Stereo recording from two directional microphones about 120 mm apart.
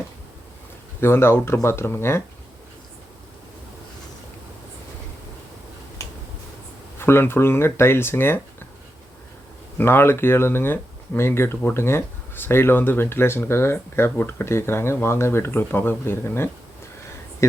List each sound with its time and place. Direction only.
1.0 s speech: 20° left (ahead or behind)
7.0 s speech: 20° left (ahead or behind)
9.7 s speech: 20° left (ahead or behind)